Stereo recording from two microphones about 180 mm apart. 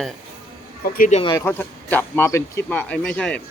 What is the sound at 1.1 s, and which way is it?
Speech, 30° left (ahead or behind).